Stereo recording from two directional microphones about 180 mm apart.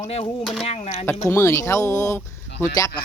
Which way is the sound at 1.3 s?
15° left (ahead or behind).